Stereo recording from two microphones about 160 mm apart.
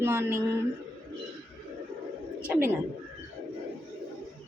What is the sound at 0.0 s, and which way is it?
Speech, 15° right (ahead or behind).